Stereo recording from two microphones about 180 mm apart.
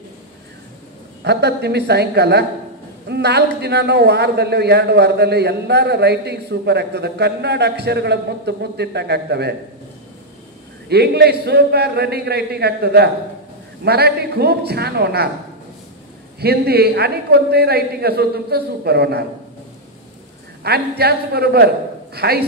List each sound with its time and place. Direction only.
1.2 s a woman's voice: 65° right (ahead or behind)
10.9 s a man's voice: 65° right (ahead or behind)
16.3 s a man's voice: 60° right (ahead or behind)
20.6 s a man's voice: 60° right (ahead or behind)